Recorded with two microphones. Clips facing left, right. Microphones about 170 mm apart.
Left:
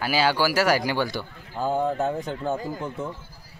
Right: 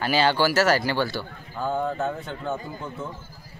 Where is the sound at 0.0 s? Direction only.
10° left (ahead or behind).